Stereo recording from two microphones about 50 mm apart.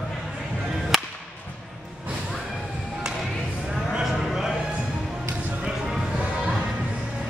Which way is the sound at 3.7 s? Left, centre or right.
Centre.